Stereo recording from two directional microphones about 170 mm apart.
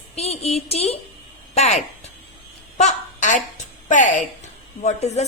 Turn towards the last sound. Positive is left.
turn(degrees=40)  # may be behind; listen again after turning